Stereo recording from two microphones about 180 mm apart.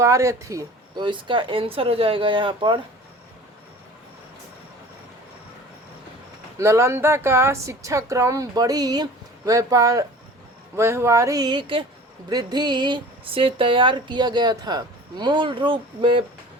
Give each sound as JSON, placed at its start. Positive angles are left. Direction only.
{"t": 0.0, "sound": "speech", "side_deg": -15}
{"t": 6.6, "sound": "a woman's voice", "side_deg": -15}